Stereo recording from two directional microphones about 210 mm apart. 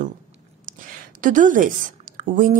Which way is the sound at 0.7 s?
40° right (ahead or behind).